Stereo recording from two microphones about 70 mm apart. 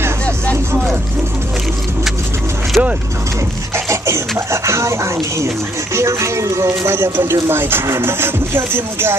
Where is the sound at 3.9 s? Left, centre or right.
Right.